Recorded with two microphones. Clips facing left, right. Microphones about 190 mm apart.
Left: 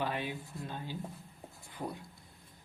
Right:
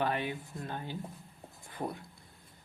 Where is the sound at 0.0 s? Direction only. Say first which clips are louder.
Right 3 dB; 60° right (ahead or behind).